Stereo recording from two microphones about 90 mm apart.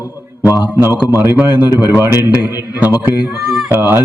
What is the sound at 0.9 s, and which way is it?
Speech, 20° right (ahead or behind).